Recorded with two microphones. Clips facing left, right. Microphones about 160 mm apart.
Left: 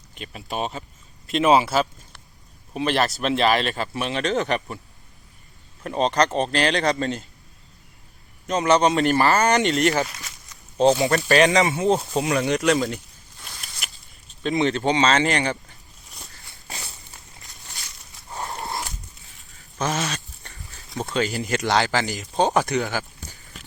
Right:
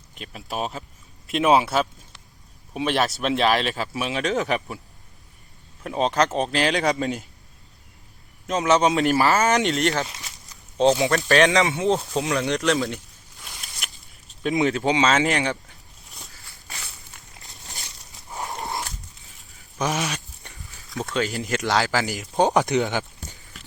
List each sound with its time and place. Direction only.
0.1 s speech: centre (ahead or behind)
5.8 s speech: centre (ahead or behind)
8.4 s speech: centre (ahead or behind)
10.1 s speech: 20° right (ahead or behind)
10.5 s speech: centre (ahead or behind)
13.8 s a sound: 5° left (ahead or behind)
14.4 s speech: 5° right (ahead or behind)
16.0 s a sound: centre (ahead or behind)
16.4 s walk: 20° left (ahead or behind)
19.8 s a sound: 15° right (ahead or behind)
21.2 s speech: centre (ahead or behind); by 23.4 s 20° right (ahead or behind)